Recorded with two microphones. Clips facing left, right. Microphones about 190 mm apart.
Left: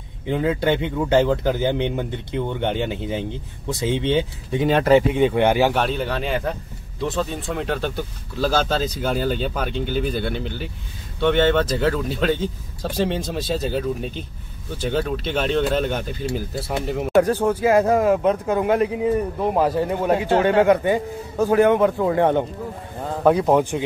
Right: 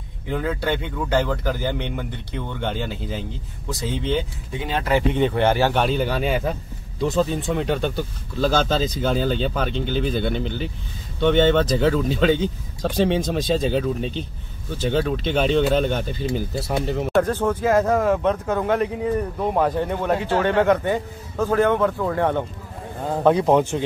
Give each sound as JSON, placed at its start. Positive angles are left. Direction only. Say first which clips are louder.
{"t": 0.3, "sound": "speech", "louder": "left 4 dB", "side_deg": 20}
{"t": 4.5, "sound": "speech", "louder": "left 9 dB", "side_deg": 40}
{"t": 5.1, "sound": "speech", "louder": "left 2 dB", "side_deg": 10}
{"t": 5.8, "sound": "speech", "louder": "right 2 dB", "side_deg": 0}
{"t": 23.2, "sound": "speech", "louder": "even", "side_deg": 5}